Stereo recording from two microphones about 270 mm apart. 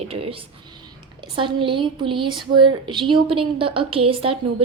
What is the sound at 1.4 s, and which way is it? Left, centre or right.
A woman's voice, centre.